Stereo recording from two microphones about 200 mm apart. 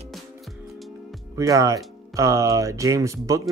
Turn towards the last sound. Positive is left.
turn(degrees=-15)  # may be behind; listen again after turning